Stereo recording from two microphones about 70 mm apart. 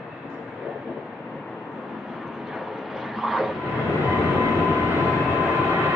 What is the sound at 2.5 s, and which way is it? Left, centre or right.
Vehicle, centre.